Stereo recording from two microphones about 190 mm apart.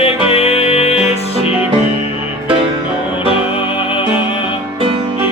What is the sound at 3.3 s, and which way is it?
Music, 30° left (ahead or behind).